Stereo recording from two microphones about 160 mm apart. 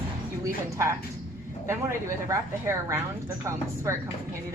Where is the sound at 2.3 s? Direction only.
20° right (ahead or behind).